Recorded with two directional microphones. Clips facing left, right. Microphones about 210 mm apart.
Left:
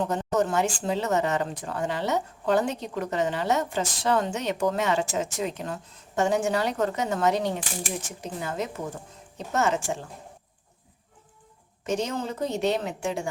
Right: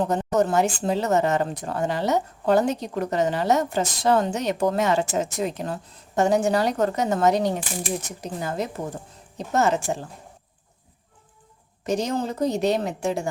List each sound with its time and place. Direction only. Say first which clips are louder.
0.0 s a woman's voice: right 3 dB; 40° right (ahead or behind)
11.9 s a woman's voice: right 3 dB; 35° right (ahead or behind)